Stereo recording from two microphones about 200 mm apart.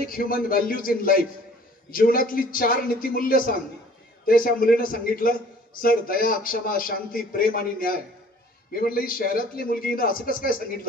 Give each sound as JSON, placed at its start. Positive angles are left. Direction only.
{"t": 0.0, "sound": "a man's voice", "side_deg": 45}